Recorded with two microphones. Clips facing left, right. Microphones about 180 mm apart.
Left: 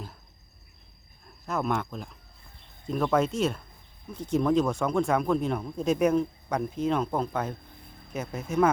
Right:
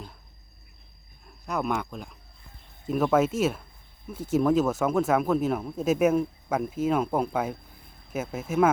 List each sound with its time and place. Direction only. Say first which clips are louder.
1.5 s speech: even; centre (ahead or behind)